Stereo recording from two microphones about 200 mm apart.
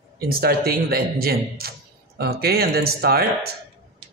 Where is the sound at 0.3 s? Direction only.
50° right (ahead or behind).